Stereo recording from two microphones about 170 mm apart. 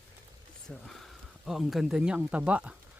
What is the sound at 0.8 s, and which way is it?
Speech, centre (ahead or behind).